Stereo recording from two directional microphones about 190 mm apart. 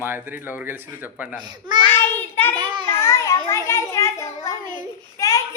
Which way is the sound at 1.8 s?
10° left (ahead or behind).